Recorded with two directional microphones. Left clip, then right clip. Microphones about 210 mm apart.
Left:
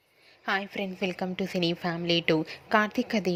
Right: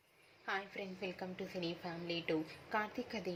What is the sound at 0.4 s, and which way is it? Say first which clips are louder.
A woman's voice: left 12 dB; 45° left (ahead or behind).